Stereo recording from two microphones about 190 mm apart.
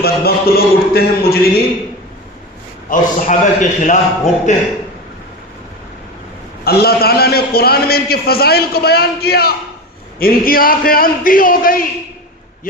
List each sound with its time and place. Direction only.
0.0 s a man's voice: 55° left (ahead or behind)
2.9 s a man's voice: 45° left (ahead or behind)
6.7 s a man's voice: 55° left (ahead or behind)